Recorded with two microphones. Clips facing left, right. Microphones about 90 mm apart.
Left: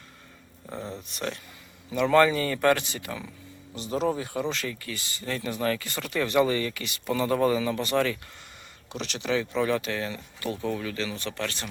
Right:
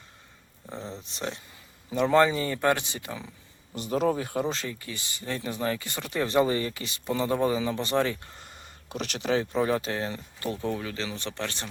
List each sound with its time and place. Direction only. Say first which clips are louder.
0.7 s a sound: left 2 dB; 10° left (ahead or behind)
1.0 s a man's voice: left 1 dB; 25° right (ahead or behind)
2.1 s speech: left 2 dB; 20° right (ahead or behind)
3.8 s speech: right 1 dB; 45° right (ahead or behind)
4.6 s speech: left 2 dB; 20° right (ahead or behind)
8.9 s speech: right 1 dB; 45° right (ahead or behind)
9.6 s speech: even; 30° right (ahead or behind)